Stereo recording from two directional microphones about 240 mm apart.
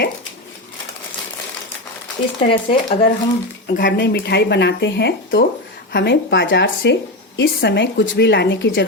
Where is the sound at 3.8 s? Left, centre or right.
Left.